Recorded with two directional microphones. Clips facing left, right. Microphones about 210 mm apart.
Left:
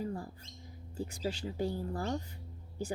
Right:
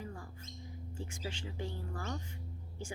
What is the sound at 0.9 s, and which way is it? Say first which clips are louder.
Speech: left 8 dB; 35° left (ahead or behind).